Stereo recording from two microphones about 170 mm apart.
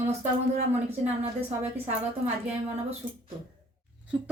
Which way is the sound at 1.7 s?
35° right (ahead or behind).